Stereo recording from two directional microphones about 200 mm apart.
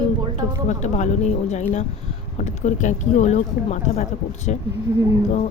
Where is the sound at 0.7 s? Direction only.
35° left (ahead or behind).